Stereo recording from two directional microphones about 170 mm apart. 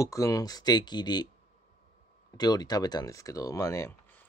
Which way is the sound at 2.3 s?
25° left (ahead or behind).